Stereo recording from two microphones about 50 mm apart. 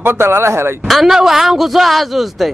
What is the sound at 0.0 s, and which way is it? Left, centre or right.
Speech, right.